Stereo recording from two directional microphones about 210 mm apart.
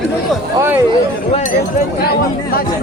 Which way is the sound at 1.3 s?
35° left (ahead or behind).